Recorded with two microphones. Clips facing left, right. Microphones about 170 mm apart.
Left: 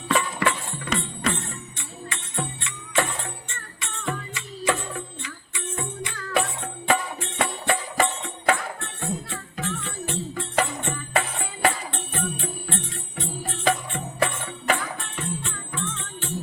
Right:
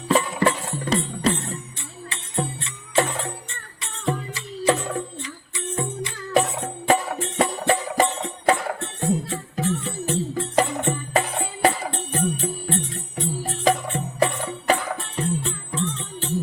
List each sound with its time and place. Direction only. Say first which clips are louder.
0.1 s music: right 4 dB; 35° right (ahead or behind)